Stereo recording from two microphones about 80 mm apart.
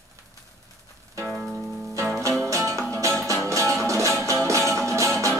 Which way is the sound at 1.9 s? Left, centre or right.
Right.